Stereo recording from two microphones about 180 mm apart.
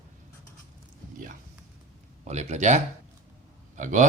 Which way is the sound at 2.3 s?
40° right (ahead or behind).